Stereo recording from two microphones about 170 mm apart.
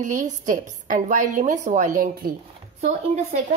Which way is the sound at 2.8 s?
40° right (ahead or behind).